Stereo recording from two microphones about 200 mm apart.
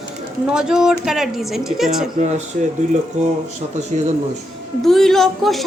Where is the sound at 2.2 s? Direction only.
35° right (ahead or behind).